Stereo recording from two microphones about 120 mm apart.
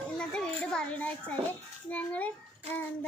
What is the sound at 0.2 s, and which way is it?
Children playing, 5° left (ahead or behind).